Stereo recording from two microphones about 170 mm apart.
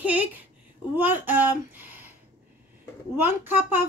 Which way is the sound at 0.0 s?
10° right (ahead or behind).